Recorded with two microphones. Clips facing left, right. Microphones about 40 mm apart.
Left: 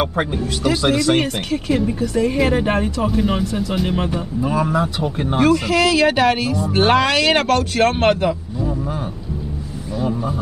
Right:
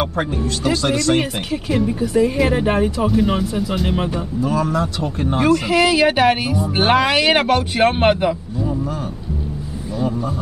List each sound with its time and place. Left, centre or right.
0.0 s speech: centre
1.2 s speech: centre
4.4 s speech: centre
5.7 s speech: centre
9.9 s speech: centre